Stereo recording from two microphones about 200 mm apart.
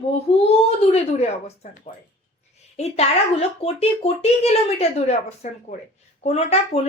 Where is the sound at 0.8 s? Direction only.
30° left (ahead or behind).